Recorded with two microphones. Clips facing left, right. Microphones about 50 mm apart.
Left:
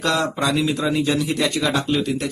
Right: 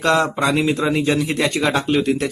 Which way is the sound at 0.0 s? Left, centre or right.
Right.